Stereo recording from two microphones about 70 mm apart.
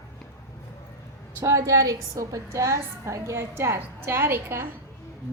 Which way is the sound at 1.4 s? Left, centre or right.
Right.